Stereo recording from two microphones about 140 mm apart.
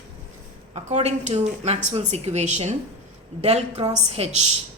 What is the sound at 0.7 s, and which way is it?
A woman's voice, 50° right (ahead or behind).